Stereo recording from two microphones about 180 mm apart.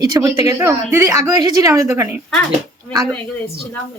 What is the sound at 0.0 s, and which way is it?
A woman's voice, 20° right (ahead or behind).